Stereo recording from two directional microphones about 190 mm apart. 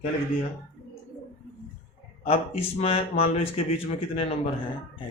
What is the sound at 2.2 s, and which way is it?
Speech, 30° left (ahead or behind).